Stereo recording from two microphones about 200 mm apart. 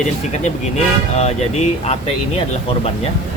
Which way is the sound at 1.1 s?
30° left (ahead or behind).